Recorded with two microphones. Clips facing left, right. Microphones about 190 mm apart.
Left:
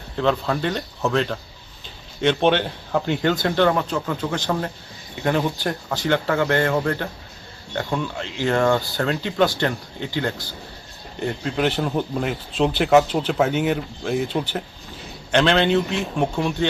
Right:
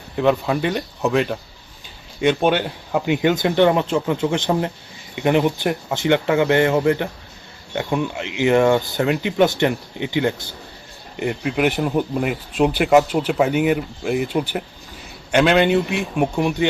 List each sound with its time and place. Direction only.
0.2 s speech: 10° right (ahead or behind)